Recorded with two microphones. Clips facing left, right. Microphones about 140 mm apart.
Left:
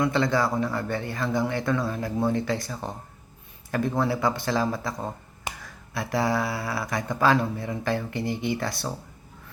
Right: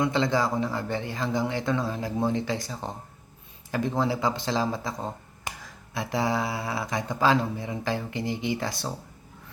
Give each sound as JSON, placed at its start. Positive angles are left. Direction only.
{"t": 0.0, "sound": "a man's voice", "side_deg": -20}